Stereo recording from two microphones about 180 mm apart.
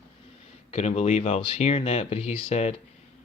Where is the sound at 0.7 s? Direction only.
35° left (ahead or behind).